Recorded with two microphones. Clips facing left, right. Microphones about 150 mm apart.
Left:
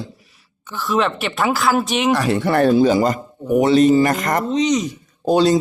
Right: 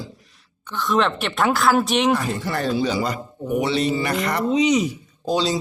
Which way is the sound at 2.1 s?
80° left.